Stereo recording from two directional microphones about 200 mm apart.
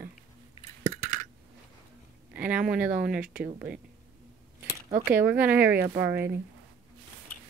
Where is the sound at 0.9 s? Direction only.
40° right (ahead or behind).